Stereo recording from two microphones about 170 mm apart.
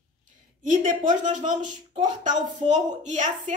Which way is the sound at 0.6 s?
50° right (ahead or behind).